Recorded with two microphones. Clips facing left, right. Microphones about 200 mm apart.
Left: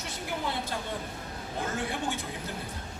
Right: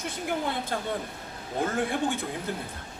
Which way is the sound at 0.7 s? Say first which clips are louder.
Right 4 dB; 55° right (ahead or behind).